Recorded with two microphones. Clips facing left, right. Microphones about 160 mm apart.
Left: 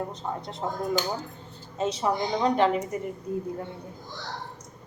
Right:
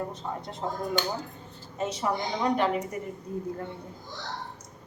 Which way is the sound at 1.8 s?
20° left (ahead or behind).